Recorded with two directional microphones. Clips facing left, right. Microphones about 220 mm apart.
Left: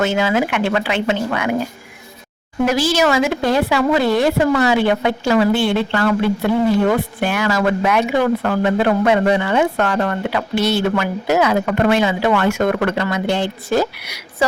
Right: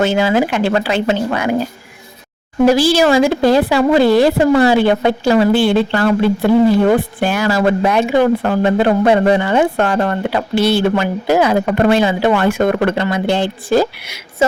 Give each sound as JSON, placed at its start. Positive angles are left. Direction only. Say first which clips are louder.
{"t": 0.0, "sound": "a woman's voice", "louder": "right 3 dB", "side_deg": -35}
{"t": 2.6, "sound": "a woman's voice", "louder": "right 5 dB", "side_deg": -30}